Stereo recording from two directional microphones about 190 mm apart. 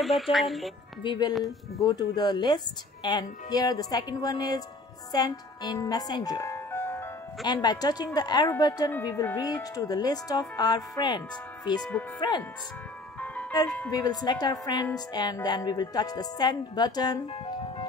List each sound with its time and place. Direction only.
0.0 s speech: centre (ahead or behind)
1.0 s speech: 25° left (ahead or behind)
13.8 s speech: 20° left (ahead or behind)